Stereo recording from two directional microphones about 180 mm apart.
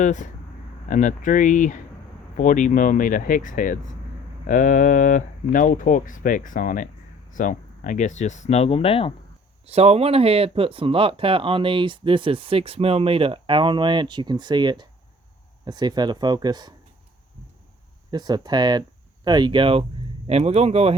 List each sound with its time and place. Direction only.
0.0 s speech: 45° left (ahead or behind)
9.6 s speech: 35° right (ahead or behind)
18.1 s speech: 25° right (ahead or behind)